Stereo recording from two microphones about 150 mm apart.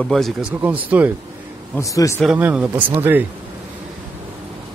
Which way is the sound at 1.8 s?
20° left (ahead or behind).